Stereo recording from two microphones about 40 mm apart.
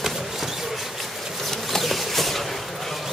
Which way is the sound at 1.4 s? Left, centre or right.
Centre.